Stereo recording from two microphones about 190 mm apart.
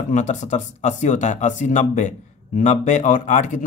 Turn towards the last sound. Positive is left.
turn(degrees=40)  # may be behind; listen again after turning